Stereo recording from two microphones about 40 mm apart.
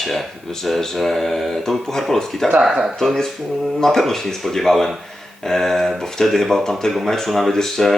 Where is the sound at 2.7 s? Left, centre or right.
Centre.